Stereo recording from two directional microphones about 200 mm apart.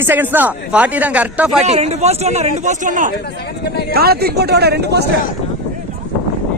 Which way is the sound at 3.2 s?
55° left (ahead or behind).